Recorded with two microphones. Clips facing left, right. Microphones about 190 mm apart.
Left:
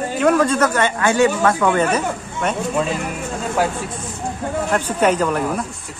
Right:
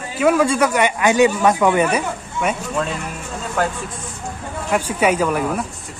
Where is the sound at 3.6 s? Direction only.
10° left (ahead or behind).